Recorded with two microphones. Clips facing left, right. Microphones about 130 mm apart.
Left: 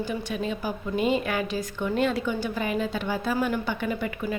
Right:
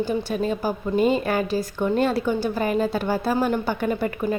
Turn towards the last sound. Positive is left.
turn(degrees=-40)  # may be behind; listen again after turning